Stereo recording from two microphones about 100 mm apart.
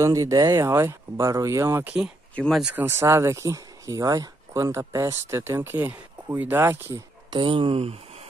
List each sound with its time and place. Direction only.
0.0 s speech: 35° right (ahead or behind)
7.2 s speech: 55° right (ahead or behind); by 8.3 s 85° right